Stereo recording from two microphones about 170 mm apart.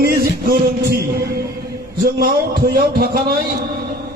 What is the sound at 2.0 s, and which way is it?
A man's voice, 60° right (ahead or behind).